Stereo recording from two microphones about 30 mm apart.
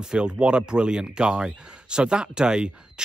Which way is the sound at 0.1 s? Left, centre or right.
Right.